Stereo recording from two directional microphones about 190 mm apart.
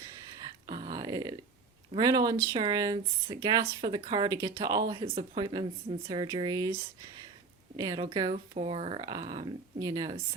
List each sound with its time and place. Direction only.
0.7 s a sound: 20° right (ahead or behind)
2.0 s speech: 20° right (ahead or behind)
7.8 s speech: 20° right (ahead or behind)